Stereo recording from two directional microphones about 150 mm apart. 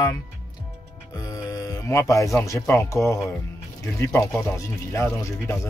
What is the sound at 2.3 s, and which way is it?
Speech, 20° left (ahead or behind).